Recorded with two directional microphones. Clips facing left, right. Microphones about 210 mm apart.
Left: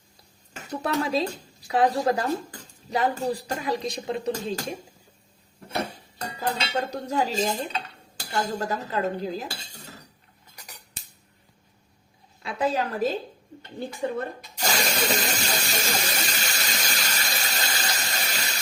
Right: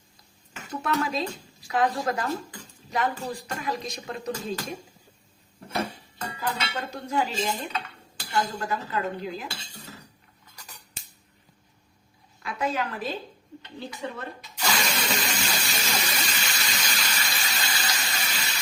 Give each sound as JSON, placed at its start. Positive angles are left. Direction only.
{"t": 0.5, "sound": "speech", "side_deg": 35}
{"t": 6.1, "sound": "dishes", "side_deg": 35}
{"t": 12.4, "sound": "a woman's voice", "side_deg": 30}
{"t": 14.4, "sound": "ratchet", "side_deg": 40}